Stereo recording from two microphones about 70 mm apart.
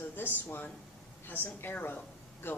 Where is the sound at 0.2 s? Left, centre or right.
Left.